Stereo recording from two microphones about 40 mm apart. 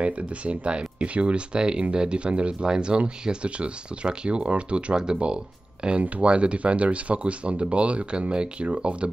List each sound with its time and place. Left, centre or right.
0.0 s speech: right